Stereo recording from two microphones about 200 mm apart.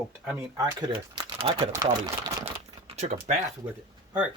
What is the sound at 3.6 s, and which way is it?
Speech, 20° right (ahead or behind).